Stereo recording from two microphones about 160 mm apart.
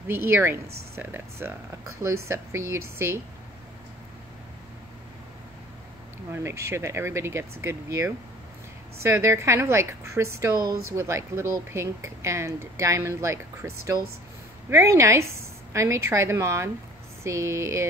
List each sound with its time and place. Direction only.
0.1 s a woman's voice: 15° right (ahead or behind)
6.3 s a woman's voice: 15° right (ahead or behind)